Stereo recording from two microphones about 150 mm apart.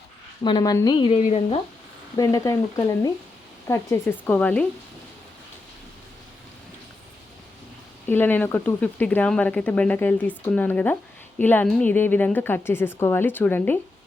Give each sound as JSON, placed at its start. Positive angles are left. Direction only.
{"t": 0.4, "sound": "speech", "side_deg": 25}
{"t": 1.1, "sound": "speech", "side_deg": 45}
{"t": 2.1, "sound": "speech", "side_deg": 20}
{"t": 8.0, "sound": "speech", "side_deg": 15}